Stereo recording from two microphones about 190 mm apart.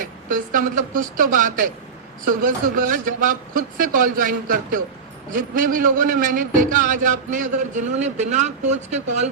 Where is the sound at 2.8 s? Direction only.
45° right (ahead or behind).